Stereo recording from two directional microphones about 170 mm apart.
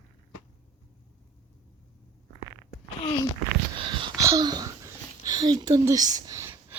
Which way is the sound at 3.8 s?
30° right (ahead or behind).